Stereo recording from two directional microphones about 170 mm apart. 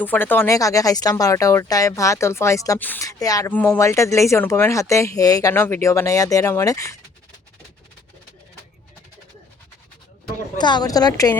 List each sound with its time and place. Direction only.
0.0 s speech: 10° left (ahead or behind)
3.5 s speech: 10° left (ahead or behind)
10.6 s speech: 25° left (ahead or behind)